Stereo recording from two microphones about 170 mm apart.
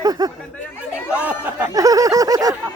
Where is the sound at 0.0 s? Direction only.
20° right (ahead or behind).